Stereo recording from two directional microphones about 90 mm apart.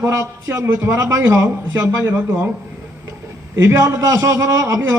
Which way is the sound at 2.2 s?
25° right (ahead or behind).